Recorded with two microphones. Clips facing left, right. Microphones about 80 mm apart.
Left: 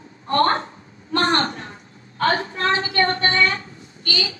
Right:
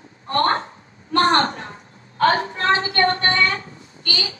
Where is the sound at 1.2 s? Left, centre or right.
Right.